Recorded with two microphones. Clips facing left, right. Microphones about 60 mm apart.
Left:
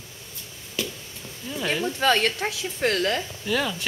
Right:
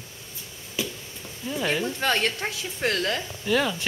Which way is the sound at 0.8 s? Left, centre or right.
Centre.